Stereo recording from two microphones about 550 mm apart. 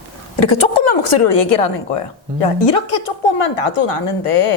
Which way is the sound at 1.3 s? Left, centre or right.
Left.